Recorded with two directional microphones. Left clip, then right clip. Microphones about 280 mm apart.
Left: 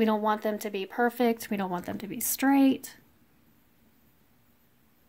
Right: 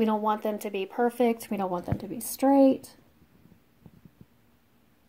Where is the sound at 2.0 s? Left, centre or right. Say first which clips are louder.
Right 2 dB; left.